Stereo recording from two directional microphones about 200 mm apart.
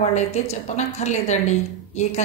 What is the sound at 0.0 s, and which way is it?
A woman's voice, 35° left (ahead or behind).